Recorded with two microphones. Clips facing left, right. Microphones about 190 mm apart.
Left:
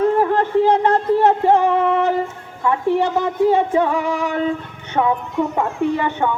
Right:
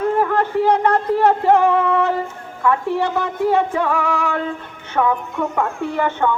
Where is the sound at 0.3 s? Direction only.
25° left (ahead or behind).